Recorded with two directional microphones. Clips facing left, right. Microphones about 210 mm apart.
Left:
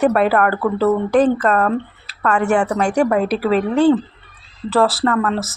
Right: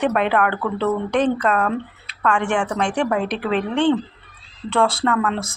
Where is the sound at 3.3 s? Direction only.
40° left (ahead or behind).